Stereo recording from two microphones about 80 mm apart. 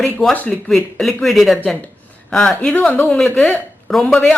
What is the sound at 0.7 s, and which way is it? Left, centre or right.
Speech, centre.